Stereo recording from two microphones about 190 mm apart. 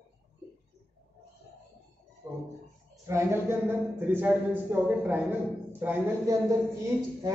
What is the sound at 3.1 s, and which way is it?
Speech, 15° right (ahead or behind).